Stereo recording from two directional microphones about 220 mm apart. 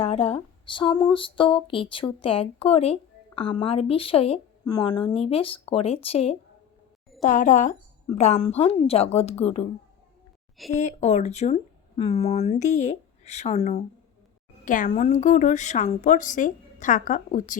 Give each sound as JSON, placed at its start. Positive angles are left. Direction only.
{"t": 0.0, "sound": "a woman's voice", "side_deg": 25}
{"t": 10.7, "sound": "a woman's voice", "side_deg": 30}